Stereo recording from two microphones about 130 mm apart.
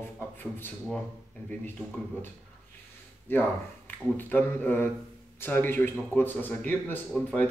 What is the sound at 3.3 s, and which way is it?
Speech, 15° left (ahead or behind).